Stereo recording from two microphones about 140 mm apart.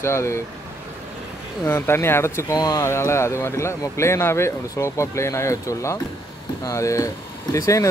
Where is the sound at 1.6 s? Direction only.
15° left (ahead or behind).